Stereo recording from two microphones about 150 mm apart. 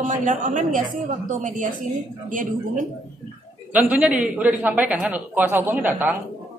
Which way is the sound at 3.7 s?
10° right (ahead or behind).